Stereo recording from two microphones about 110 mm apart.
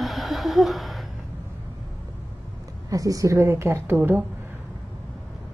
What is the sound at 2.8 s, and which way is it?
A woman's voice, 30° right (ahead or behind).